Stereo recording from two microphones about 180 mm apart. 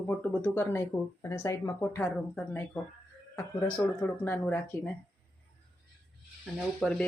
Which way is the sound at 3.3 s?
15° left (ahead or behind).